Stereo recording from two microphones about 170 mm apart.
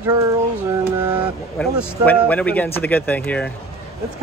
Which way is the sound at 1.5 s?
10° left (ahead or behind).